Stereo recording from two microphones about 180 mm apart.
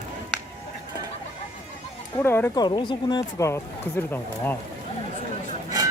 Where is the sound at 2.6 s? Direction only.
25° left (ahead or behind).